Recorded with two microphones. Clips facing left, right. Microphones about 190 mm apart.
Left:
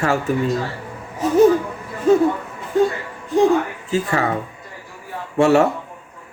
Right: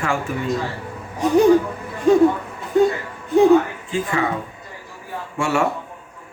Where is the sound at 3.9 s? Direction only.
40° left (ahead or behind).